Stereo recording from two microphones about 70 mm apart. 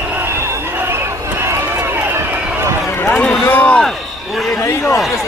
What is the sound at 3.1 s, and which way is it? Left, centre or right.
Run, centre.